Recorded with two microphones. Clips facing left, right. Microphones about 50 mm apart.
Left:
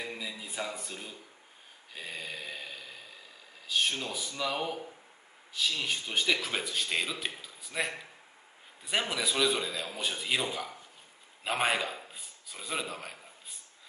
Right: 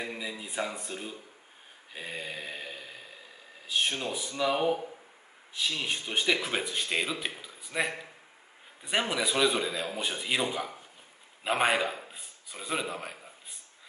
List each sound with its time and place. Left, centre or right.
0.0 s speech: centre
2.0 s mantra: centre
3.6 s speech: centre
9.1 s a man's voice: centre